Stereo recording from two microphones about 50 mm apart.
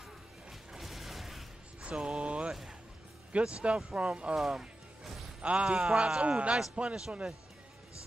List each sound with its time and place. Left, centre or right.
0.5 s music: centre
1.8 s music: right
3.3 s speech: right
4.4 s music: centre
5.4 s speech: right